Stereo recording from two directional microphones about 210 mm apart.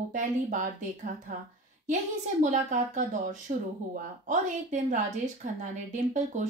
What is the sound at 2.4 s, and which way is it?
Speech, 35° right (ahead or behind).